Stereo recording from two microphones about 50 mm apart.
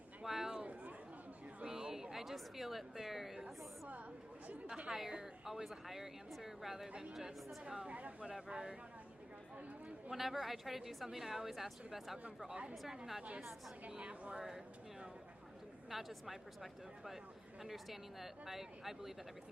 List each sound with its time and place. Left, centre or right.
0.3 s a sound: centre
0.5 s chatter: right
1.6 s a sound: centre
4.9 s a woman's voice: centre; by 8.3 s right
8.3 s speech: centre
10.1 s a woman's voice: centre
12.5 s speech: centre
13.8 s speech: right
15.9 s a woman's voice: centre
17.6 s a woman's voice: centre